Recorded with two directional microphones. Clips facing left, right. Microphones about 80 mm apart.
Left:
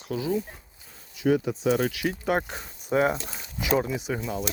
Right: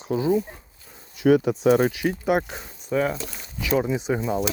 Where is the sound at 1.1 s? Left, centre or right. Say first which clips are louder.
Right 5 dB; right.